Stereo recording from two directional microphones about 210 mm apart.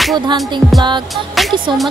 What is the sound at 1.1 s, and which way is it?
Speech, centre (ahead or behind).